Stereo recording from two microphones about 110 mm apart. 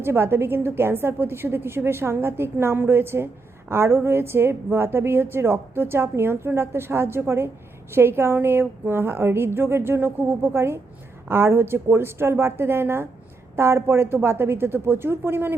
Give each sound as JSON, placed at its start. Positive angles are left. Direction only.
{"t": 0.0, "sound": "a woman's voice", "side_deg": -20}